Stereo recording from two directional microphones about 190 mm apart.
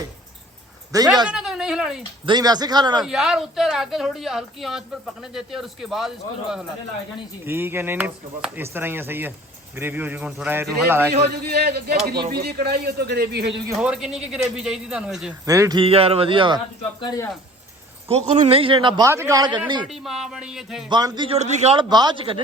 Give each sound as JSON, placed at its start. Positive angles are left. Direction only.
{"t": 0.9, "sound": "speech", "side_deg": -20}
{"t": 1.3, "sound": "speech", "side_deg": -5}
{"t": 2.2, "sound": "a man's voice", "side_deg": -20}
{"t": 3.0, "sound": "speech", "side_deg": 0}
{"t": 7.4, "sound": "speech", "side_deg": -10}
{"t": 11.2, "sound": "a man's voice", "side_deg": -55}
{"t": 13.7, "sound": "speech", "side_deg": -5}
{"t": 15.4, "sound": "speech", "side_deg": -20}
{"t": 15.8, "sound": "a man's voice", "side_deg": -30}
{"t": 17.0, "sound": "speech", "side_deg": 20}
{"t": 18.1, "sound": "a man's voice", "side_deg": -30}
{"t": 19.9, "sound": "speech", "side_deg": 0}
{"t": 20.9, "sound": "a man's voice", "side_deg": -25}